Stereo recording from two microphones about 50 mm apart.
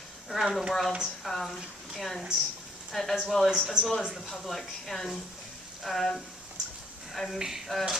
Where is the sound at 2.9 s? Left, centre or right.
Centre.